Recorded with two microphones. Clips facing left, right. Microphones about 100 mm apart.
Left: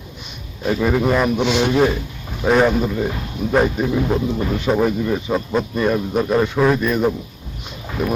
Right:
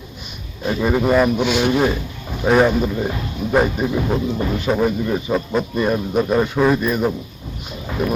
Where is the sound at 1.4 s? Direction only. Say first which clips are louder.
Even; 25° left (ahead or behind).